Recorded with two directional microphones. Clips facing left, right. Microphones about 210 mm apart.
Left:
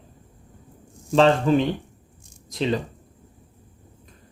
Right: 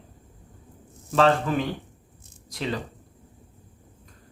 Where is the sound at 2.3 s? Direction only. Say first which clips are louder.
Left 6 dB; 20° left (ahead or behind).